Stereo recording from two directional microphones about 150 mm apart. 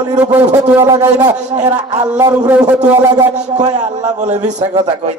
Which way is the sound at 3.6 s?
50° right (ahead or behind).